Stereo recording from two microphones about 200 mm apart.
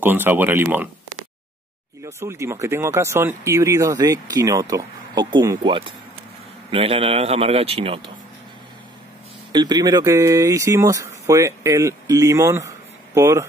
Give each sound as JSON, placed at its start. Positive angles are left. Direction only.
{"t": 0.0, "sound": "speech", "side_deg": -10}
{"t": 2.0, "sound": "a man's voice", "side_deg": -15}
{"t": 9.5, "sound": "speech", "side_deg": -20}